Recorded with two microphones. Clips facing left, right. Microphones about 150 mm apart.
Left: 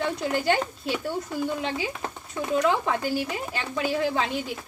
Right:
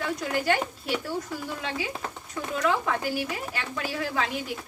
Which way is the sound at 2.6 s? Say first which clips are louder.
Left 2 dB; 25° left (ahead or behind).